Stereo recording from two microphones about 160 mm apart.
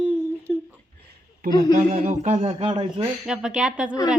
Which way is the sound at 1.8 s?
50° right (ahead or behind).